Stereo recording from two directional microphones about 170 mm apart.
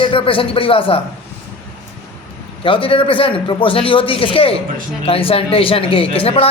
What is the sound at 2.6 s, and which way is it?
A man's voice, 30° left (ahead or behind).